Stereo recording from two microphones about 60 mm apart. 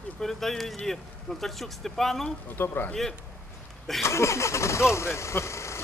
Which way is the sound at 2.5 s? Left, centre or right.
Left.